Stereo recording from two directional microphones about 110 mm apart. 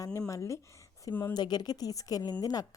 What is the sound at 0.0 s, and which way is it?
Speech, 30° left (ahead or behind).